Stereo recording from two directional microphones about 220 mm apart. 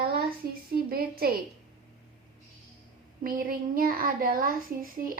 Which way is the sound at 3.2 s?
40° right (ahead or behind).